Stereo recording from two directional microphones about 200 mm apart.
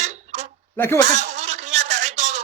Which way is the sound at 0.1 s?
35° right (ahead or behind).